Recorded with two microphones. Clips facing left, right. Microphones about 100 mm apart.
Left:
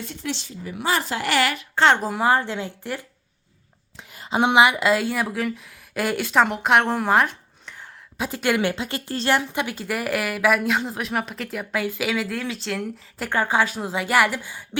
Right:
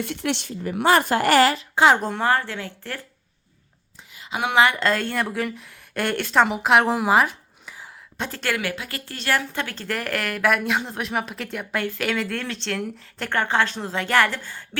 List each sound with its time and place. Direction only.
0.0 s speech: 65° right (ahead or behind); by 1.6 s 35° right (ahead or behind)
1.7 s speech: 5° right (ahead or behind); by 3.0 s 15° left (ahead or behind)
4.3 s speech: 30° left (ahead or behind)
4.5 s speech: 15° left (ahead or behind); by 7.9 s 5° right (ahead or behind)
8.2 s speech: 10° left (ahead or behind)
8.4 s speech: 25° left (ahead or behind)